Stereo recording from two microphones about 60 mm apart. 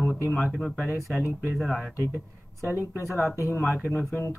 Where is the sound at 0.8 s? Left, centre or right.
Right.